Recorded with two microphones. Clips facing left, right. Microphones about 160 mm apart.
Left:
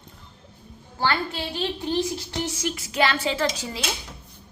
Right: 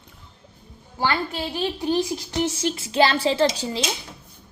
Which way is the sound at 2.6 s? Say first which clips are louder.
Right 3 dB; 30° right (ahead or behind).